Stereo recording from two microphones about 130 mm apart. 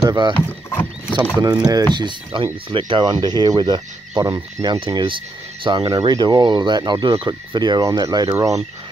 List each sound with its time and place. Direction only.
0.1 s speech: 35° right (ahead or behind)
1.4 s speech: 30° right (ahead or behind)
5.9 s speech: 30° right (ahead or behind)